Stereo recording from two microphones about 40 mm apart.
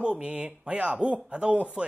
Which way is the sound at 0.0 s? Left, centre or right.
Right.